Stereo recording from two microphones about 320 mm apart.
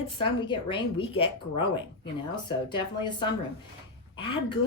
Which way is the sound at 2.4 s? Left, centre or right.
Centre.